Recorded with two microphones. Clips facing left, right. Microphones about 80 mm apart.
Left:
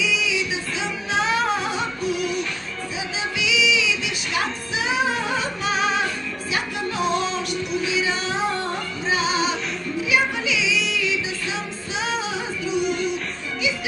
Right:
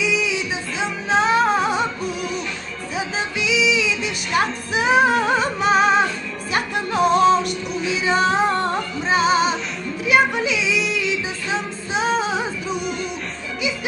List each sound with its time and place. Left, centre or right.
0.0 s music: right
3.3 s music: right
4.7 s music: right
8.1 s female singing: right
9.1 s music: right
11.9 s music: right